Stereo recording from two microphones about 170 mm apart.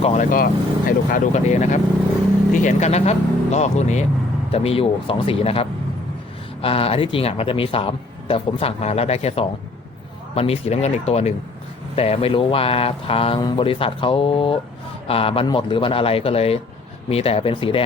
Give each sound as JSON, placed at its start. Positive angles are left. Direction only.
{"t": 0.0, "sound": "speech", "side_deg": 40}
{"t": 0.3, "sound": "speech", "side_deg": 55}